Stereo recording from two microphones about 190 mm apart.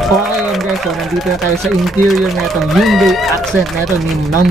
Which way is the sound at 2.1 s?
Centre (ahead or behind).